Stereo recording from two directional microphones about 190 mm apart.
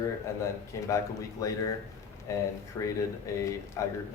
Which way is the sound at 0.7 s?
15° left (ahead or behind).